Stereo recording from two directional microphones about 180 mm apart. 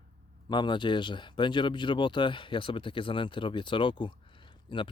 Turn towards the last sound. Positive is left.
turn(degrees=30)  # may be behind; listen again after turning